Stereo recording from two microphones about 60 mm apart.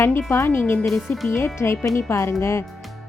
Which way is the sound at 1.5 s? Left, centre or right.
Left.